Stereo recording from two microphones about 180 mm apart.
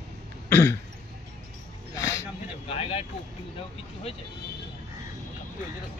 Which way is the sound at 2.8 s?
30° left (ahead or behind).